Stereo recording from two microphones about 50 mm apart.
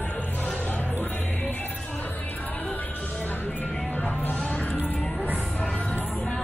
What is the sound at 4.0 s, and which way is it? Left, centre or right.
Music, left.